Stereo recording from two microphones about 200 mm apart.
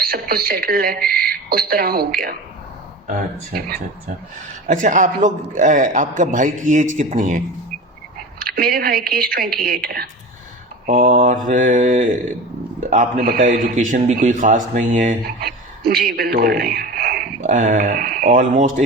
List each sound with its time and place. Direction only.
0.0 s a woman's voice: 50° right (ahead or behind)
4.6 s a man's voice: 40° right (ahead or behind)